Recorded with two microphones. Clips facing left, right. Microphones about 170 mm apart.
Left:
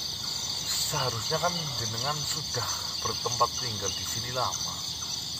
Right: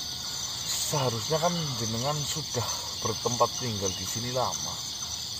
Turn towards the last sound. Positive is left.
turn(degrees=-25)  # may be behind; listen again after turning